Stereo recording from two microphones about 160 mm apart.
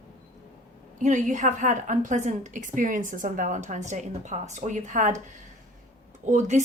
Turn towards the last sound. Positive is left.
turn(degrees=-50)  # may be behind; listen again after turning